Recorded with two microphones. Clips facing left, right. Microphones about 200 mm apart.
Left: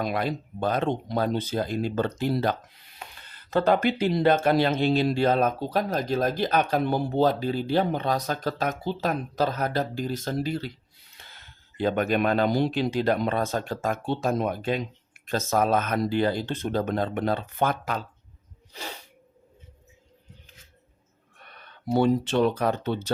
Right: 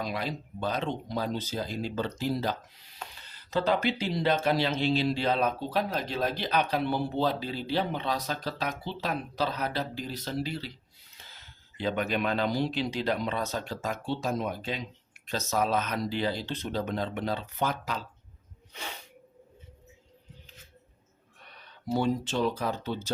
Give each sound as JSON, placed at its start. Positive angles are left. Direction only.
{"t": 0.0, "sound": "speech", "side_deg": 55}
{"t": 11.2, "sound": "speech", "side_deg": 60}
{"t": 18.7, "sound": "sneeze", "side_deg": 35}
{"t": 21.3, "sound": "speech", "side_deg": 55}